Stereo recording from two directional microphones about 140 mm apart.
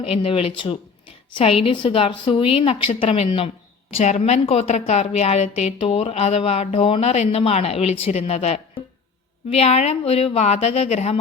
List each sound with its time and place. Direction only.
0.0 s a woman's voice: 40° left (ahead or behind)